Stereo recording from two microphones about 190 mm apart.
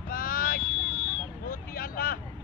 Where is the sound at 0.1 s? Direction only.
50° left (ahead or behind).